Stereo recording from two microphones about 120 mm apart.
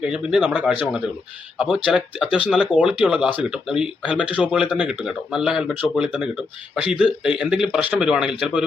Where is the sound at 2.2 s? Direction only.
50° left (ahead or behind).